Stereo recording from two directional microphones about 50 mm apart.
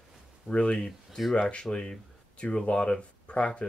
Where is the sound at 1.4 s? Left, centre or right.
Centre.